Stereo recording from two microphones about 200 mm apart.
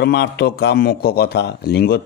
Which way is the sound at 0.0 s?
55° left (ahead or behind).